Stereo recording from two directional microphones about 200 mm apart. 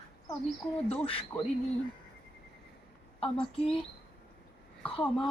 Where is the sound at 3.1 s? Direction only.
25° left (ahead or behind).